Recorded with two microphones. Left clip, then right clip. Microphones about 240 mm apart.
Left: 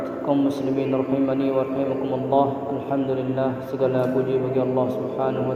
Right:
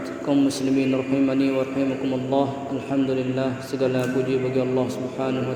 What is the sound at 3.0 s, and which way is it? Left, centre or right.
A man's voice, right.